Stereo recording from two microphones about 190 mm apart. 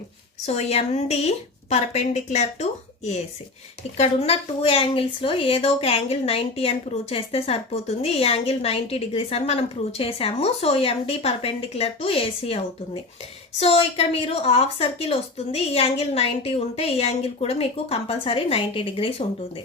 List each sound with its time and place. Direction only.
0.4 s speech: 35° left (ahead or behind)